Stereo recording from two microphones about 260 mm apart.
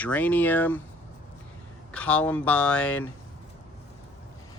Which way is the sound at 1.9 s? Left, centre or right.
Centre.